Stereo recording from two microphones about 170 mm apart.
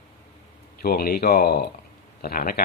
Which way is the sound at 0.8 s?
65° left (ahead or behind).